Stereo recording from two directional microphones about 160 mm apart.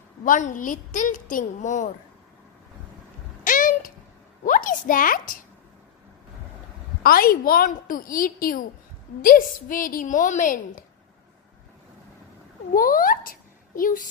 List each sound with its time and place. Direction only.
0.2 s a woman's voice: 55° left (ahead or behind)
3.4 s a sound: 55° left (ahead or behind)
4.5 s a child's voice: 55° left (ahead or behind)
7.0 s a woman's voice: 65° left (ahead or behind)
12.7 s a child's voice: 60° left (ahead or behind)